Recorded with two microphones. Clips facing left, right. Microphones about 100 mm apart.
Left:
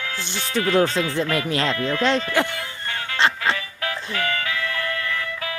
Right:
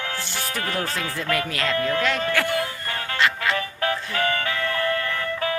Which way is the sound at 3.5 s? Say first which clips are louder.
Right 4 dB; 35° right (ahead or behind).